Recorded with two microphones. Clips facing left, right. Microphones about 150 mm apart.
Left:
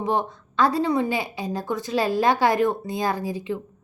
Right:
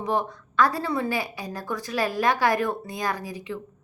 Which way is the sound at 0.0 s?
25° left (ahead or behind).